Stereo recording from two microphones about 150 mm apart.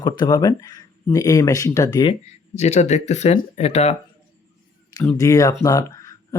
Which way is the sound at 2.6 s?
50° left (ahead or behind).